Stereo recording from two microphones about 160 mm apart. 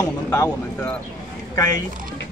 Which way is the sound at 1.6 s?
25° left (ahead or behind).